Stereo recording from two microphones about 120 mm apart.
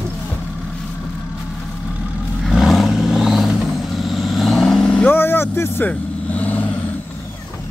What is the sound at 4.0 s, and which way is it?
Vehicle, centre (ahead or behind).